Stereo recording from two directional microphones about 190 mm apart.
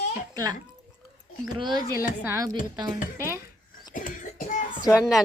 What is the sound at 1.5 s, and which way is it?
A woman's voice, 25° right (ahead or behind).